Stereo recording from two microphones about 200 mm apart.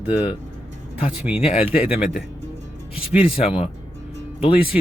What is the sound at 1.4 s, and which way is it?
Speech, 30° left (ahead or behind).